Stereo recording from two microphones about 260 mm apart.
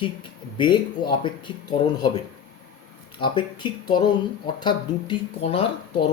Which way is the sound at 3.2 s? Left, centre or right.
Centre.